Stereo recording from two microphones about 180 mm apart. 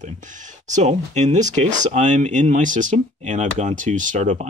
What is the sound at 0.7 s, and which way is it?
Speech, 40° right (ahead or behind).